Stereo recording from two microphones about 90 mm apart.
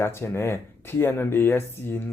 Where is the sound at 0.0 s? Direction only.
30° left (ahead or behind).